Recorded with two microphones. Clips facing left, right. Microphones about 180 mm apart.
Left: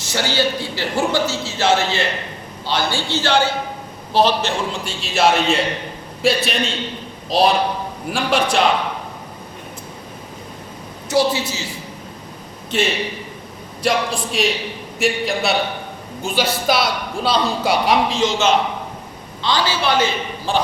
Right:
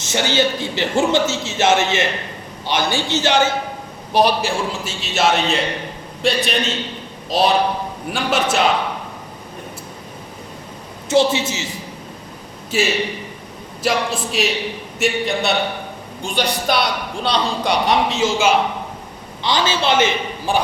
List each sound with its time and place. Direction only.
0.0 s a man's voice: 20° right (ahead or behind); by 8.6 s centre (ahead or behind)
11.1 s a man's voice: 25° right (ahead or behind)
12.7 s a man's voice: 5° right (ahead or behind)
19.4 s a man's voice: 20° right (ahead or behind)